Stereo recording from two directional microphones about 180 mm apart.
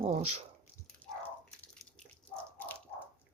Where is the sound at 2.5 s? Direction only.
10° left (ahead or behind).